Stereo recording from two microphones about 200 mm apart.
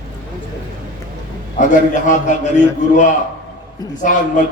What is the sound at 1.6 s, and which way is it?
Speech, 40° left (ahead or behind).